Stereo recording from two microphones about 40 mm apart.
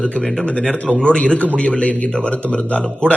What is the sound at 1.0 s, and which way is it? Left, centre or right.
Speech, left.